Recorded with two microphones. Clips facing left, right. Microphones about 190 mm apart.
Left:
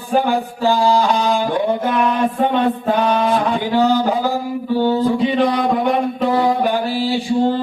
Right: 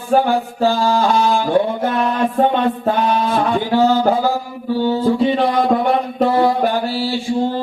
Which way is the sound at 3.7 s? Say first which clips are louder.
Right 1 dB; 15° left (ahead or behind).